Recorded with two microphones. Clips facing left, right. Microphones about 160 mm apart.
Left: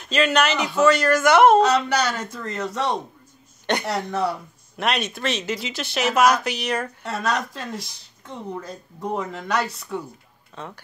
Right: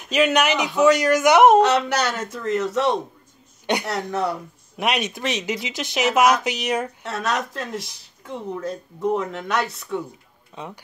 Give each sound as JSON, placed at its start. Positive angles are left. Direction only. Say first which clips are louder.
{"t": 0.0, "sound": "speech", "louder": "right 1 dB", "side_deg": -15}
{"t": 1.6, "sound": "speech", "louder": "right 1 dB", "side_deg": -5}
{"t": 4.7, "sound": "speech", "louder": "right 1 dB", "side_deg": -15}
{"t": 7.0, "sound": "speech", "louder": "even", "side_deg": 0}
{"t": 9.1, "sound": "speech", "louder": "left 1 dB", "side_deg": 0}
{"t": 10.5, "sound": "speech", "louder": "right 1 dB", "side_deg": -15}